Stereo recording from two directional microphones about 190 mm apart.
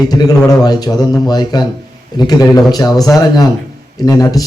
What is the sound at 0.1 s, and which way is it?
A man's voice, 20° left (ahead or behind).